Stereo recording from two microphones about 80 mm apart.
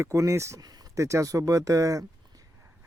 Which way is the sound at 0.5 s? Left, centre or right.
Right.